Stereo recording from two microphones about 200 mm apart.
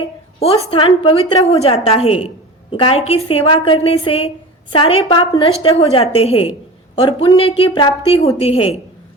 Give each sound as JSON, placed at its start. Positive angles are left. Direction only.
{"t": 0.0, "sound": "a woman's voice", "side_deg": 30}